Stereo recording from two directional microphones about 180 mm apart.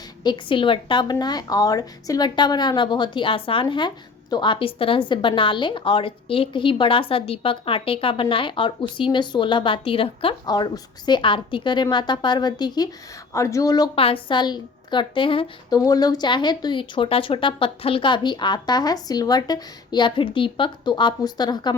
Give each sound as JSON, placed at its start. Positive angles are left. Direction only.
{"t": 0.2, "sound": "speech", "side_deg": 25}